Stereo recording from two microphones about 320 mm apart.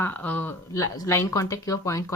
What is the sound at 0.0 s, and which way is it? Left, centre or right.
A woman's voice, centre.